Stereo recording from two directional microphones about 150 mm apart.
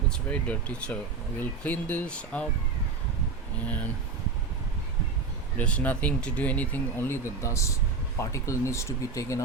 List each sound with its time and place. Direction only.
0.1 s speech: 10° left (ahead or behind)
5.5 s speech: 10° left (ahead or behind)